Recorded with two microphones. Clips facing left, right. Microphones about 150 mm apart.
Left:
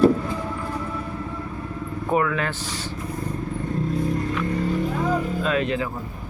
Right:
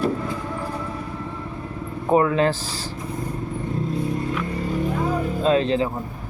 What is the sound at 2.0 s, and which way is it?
Speech, 30° right (ahead or behind).